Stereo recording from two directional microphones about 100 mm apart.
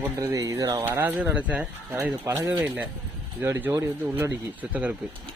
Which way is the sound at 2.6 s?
15° right (ahead or behind).